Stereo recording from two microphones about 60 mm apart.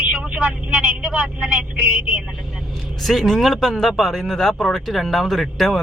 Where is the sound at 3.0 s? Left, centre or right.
Centre.